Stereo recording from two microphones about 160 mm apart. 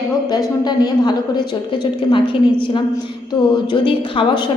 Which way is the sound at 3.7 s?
30° left (ahead or behind).